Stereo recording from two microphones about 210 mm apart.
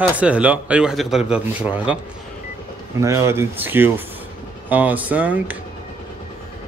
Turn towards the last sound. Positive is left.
turn(degrees=-5)  # may be behind; listen again after turning